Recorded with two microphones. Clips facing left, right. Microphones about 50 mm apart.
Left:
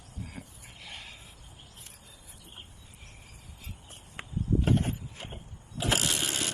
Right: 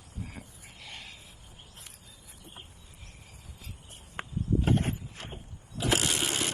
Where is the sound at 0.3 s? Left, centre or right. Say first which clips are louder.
Left 1 dB; centre.